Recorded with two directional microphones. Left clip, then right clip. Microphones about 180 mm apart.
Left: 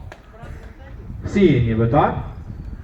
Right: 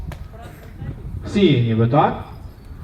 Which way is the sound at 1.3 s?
35° right (ahead or behind).